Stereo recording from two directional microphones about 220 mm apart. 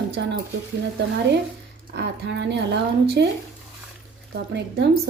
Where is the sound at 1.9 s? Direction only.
50° right (ahead or behind).